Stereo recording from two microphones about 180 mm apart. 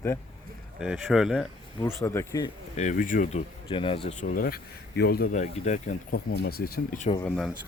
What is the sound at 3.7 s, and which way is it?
Speech, 30° left (ahead or behind).